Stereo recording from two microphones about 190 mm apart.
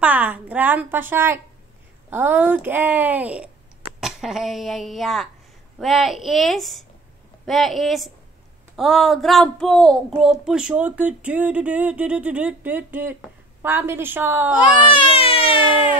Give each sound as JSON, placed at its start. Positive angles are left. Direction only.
{"t": 0.0, "sound": "a woman's voice", "side_deg": -10}
{"t": 14.8, "sound": "speech", "side_deg": 30}